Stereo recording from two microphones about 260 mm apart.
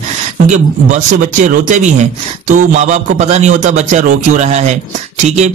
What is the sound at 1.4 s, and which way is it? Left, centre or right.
Speech, right.